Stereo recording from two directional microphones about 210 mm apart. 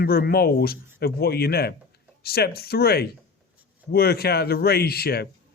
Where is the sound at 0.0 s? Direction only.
45° left (ahead or behind).